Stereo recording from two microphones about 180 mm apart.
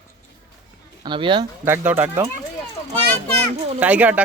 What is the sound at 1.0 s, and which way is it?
Speech, 25° right (ahead or behind).